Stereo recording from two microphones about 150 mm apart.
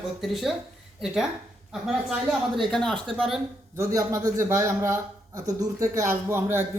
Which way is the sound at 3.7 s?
20° right (ahead or behind).